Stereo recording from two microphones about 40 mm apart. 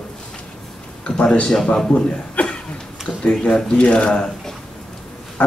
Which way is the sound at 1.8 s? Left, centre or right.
Centre.